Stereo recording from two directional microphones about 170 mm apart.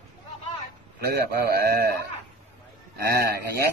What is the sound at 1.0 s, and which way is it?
Speech, 70° right (ahead or behind).